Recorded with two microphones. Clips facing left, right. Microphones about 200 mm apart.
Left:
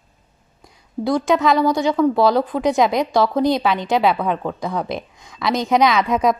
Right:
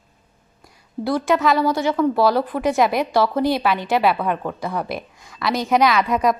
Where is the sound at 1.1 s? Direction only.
15° left (ahead or behind).